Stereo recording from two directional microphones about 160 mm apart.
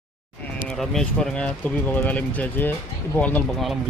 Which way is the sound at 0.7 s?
Centre (ahead or behind).